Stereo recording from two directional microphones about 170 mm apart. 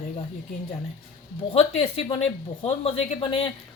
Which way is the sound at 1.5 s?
40° left (ahead or behind).